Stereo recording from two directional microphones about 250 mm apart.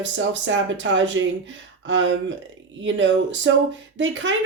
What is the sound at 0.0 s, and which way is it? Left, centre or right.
A woman's voice, right.